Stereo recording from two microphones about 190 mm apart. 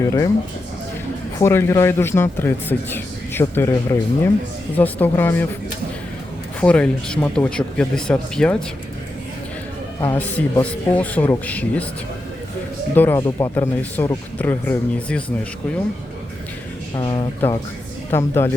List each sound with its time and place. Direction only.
0.0 s a man's voice: 15° left (ahead or behind)
1.4 s a man's voice: 15° left (ahead or behind)
6.6 s speech: 5° left (ahead or behind)
10.0 s a man's voice: 10° left (ahead or behind)
12.9 s a man's voice: 10° left (ahead or behind)
16.9 s speech: 25° left (ahead or behind)
18.1 s a man's voice: 10° left (ahead or behind)